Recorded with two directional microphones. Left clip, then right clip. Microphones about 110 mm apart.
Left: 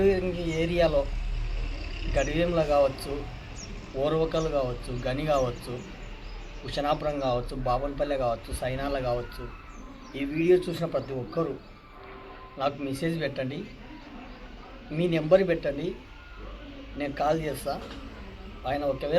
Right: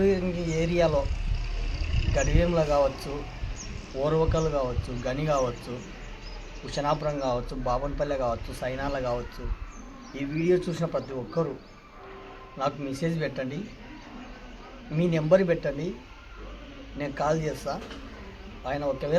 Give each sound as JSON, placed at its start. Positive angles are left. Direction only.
{"t": 0.0, "sound": "a sound", "side_deg": -30}
{"t": 2.1, "sound": "a man's voice", "side_deg": -20}
{"t": 6.7, "sound": "a man's voice", "side_deg": -30}
{"t": 10.3, "sound": "a man's voice", "side_deg": -30}
{"t": 12.5, "sound": "a man's voice", "side_deg": -30}
{"t": 14.9, "sound": "a man's voice", "side_deg": -25}
{"t": 17.0, "sound": "a man's voice", "side_deg": -30}